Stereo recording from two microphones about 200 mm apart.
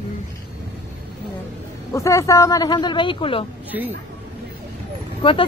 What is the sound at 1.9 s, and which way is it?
Speech, 15° left (ahead or behind).